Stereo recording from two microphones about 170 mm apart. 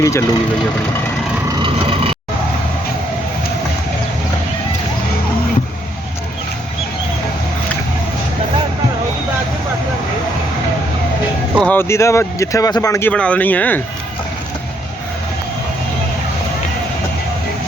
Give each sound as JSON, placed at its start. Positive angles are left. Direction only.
{"t": 0.0, "sound": "speech", "side_deg": 15}
{"t": 1.5, "sound": "vehicle", "side_deg": -25}
{"t": 11.5, "sound": "speech", "side_deg": 10}